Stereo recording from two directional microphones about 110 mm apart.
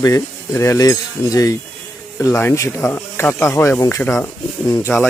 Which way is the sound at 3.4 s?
25° left (ahead or behind).